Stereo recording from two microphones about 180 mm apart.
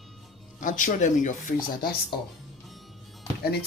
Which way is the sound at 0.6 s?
45° left (ahead or behind).